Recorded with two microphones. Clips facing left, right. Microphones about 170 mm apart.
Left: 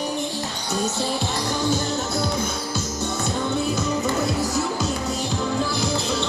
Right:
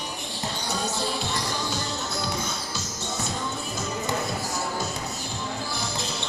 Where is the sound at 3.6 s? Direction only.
70° left (ahead or behind).